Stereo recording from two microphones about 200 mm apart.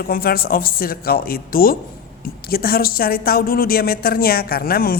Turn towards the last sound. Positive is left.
turn(degrees=45)  # may be behind; listen again after turning